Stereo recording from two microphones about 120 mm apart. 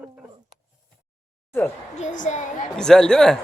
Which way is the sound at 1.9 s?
90° left.